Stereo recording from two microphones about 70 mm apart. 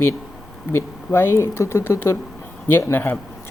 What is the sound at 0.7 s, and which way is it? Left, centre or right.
Speech, left.